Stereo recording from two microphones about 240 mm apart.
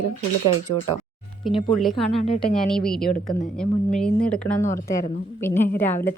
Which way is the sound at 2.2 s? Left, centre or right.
Left.